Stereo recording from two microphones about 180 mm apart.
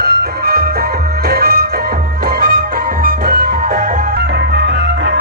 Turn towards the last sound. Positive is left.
turn(degrees=-70)  # may be behind; listen again after turning